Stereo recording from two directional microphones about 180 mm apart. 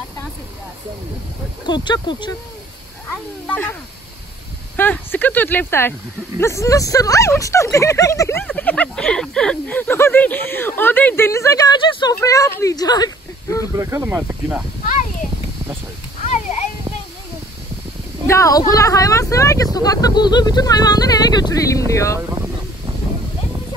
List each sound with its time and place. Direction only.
1.7 s speech: 25° left (ahead or behind)
3.4 s speech: 10° left (ahead or behind)
4.7 s speech: 10° left (ahead or behind)
13.7 s speech: 15° right (ahead or behind)
18.2 s speech: 15° left (ahead or behind)